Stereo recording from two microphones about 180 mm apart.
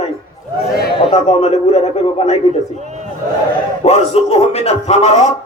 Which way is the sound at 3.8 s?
35° left (ahead or behind).